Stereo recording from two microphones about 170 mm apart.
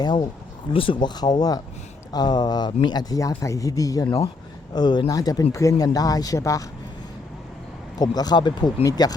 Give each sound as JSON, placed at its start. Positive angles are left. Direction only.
{"t": 0.0, "sound": "speech", "side_deg": 25}
{"t": 7.9, "sound": "speech", "side_deg": 25}